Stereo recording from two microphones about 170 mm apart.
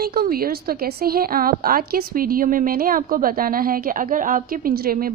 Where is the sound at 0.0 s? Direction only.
60° right (ahead or behind).